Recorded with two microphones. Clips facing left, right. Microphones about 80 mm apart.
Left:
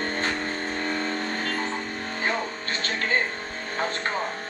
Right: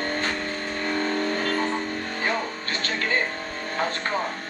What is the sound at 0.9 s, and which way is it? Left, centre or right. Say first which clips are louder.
Vehicle: right 3 dB; right.